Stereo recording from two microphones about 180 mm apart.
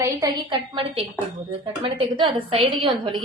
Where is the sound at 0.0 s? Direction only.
20° right (ahead or behind).